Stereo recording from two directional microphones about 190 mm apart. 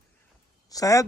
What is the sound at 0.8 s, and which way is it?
Speech, 15° left (ahead or behind).